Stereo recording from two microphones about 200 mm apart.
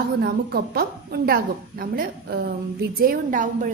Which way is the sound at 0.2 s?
50° right (ahead or behind).